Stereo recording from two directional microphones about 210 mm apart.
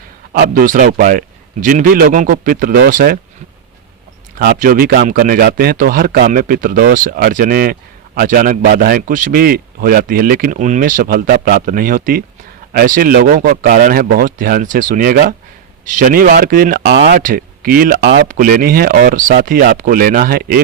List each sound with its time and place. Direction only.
0.3 s speech: 40° right (ahead or behind)
4.4 s speech: 45° right (ahead or behind)
17.1 s speech: 40° right (ahead or behind)
18.3 s speech: 40° right (ahead or behind)